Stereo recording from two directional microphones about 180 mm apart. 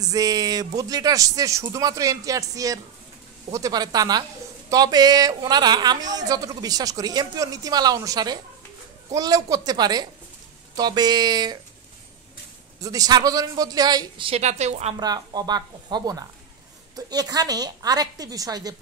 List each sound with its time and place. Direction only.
0.0 s a woman's voice: 20° right (ahead or behind)
12.8 s a woman's voice: 20° right (ahead or behind); by 15.0 s 35° right (ahead or behind)
15.0 s a woman's voice: 20° right (ahead or behind)